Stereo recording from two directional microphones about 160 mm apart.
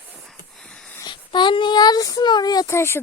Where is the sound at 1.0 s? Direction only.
30° left (ahead or behind).